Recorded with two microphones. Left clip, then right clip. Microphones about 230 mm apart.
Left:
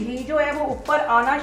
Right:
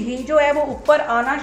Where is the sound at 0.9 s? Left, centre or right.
Right.